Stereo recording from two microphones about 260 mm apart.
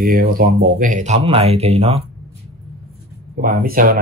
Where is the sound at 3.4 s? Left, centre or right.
Right.